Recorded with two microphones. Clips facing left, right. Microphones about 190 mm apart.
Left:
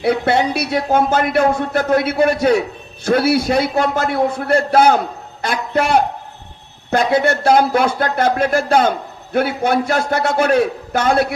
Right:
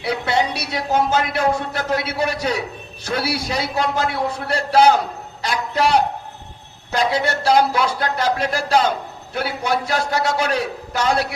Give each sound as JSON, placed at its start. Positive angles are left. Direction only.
{"t": 0.0, "sound": "speech", "side_deg": 55}